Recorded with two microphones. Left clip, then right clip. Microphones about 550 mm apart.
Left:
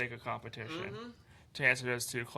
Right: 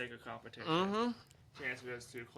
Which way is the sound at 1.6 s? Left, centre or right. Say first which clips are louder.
Left 12 dB; left.